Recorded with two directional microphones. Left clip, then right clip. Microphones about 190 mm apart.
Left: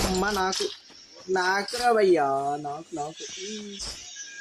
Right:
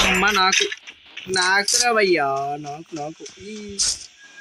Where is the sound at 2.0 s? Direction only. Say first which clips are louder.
Right 3 dB; 15° right (ahead or behind).